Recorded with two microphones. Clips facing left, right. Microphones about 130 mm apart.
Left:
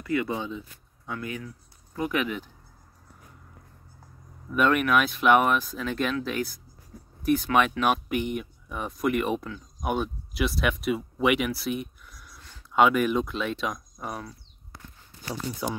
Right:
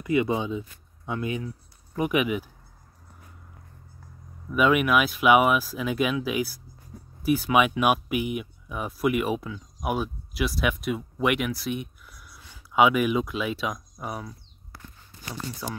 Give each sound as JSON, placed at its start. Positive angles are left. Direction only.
{"t": 0.0, "sound": "speech", "side_deg": -20}
{"t": 4.5, "sound": "speech", "side_deg": -5}
{"t": 15.6, "sound": "speech", "side_deg": 15}